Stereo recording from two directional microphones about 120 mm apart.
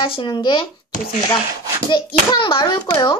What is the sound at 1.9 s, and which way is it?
A child's voice, 40° left (ahead or behind).